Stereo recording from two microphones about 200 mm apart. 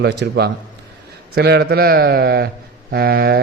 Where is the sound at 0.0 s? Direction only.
55° right (ahead or behind).